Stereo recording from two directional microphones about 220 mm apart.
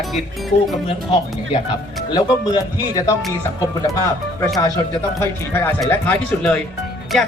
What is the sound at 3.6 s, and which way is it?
Speech, 15° left (ahead or behind).